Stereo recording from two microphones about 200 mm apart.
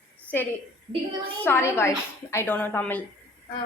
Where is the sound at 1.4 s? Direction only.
10° left (ahead or behind).